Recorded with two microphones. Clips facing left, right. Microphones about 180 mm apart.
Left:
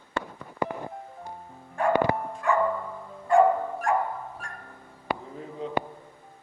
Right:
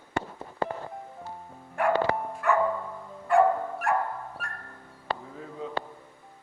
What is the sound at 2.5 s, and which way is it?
Music, 5° right (ahead or behind).